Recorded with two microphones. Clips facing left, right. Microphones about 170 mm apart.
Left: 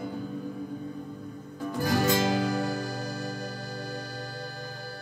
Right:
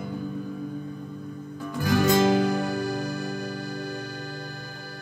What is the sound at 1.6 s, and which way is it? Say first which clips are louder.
Music: right 2 dB; 35° left (ahead or behind).